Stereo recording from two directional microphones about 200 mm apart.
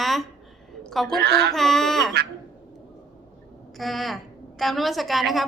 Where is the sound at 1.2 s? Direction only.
55° right (ahead or behind).